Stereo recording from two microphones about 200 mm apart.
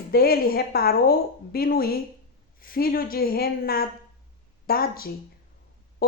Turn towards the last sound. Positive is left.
turn(degrees=50)  # may be behind; listen again after turning